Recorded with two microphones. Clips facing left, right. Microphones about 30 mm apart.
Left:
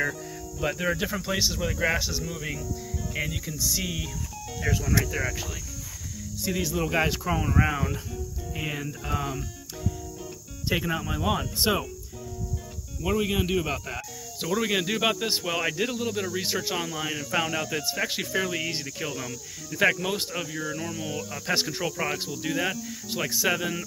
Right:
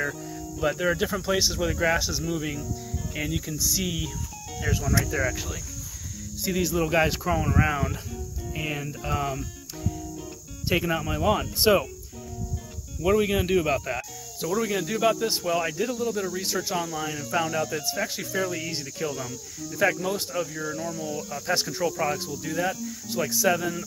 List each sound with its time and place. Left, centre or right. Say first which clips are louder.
0.6 s speech: right 3 dB; centre
8.8 s speech: right 2 dB; centre
10.7 s speech: right 2 dB; centre
13.2 s speech: right 3 dB; centre
14.4 s speech: even; left
15.2 s speech: right 1 dB; left
19.7 s speech: left 1 dB; left
20.1 s speech: right 2 dB; left
20.9 s speech: right 1 dB; left
21.3 s speech: even; left
22.5 s speech: right 1 dB; left